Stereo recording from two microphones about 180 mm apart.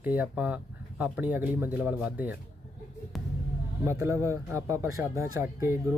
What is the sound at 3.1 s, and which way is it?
Basketball bounce, centre (ahead or behind).